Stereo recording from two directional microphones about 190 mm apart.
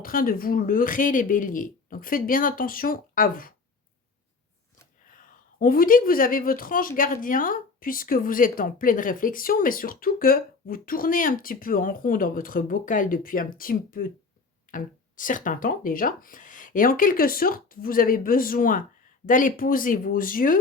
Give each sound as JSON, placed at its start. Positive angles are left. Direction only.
{"t": 0.0, "sound": "speech", "side_deg": 50}
{"t": 5.0, "sound": "speech", "side_deg": 45}